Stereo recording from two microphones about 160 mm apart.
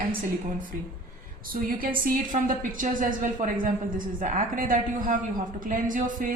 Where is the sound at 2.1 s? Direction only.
55° right (ahead or behind).